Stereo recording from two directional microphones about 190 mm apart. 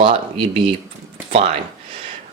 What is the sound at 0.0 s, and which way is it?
A man's voice, 30° right (ahead or behind).